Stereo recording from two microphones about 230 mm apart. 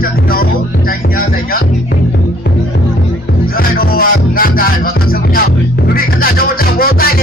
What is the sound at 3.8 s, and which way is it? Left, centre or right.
Music, left.